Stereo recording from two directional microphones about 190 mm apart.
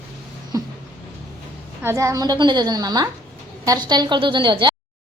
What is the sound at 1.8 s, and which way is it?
A woman's voice, 15° right (ahead or behind).